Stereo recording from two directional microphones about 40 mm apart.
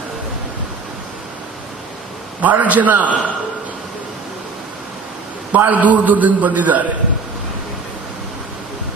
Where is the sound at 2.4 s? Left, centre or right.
Right.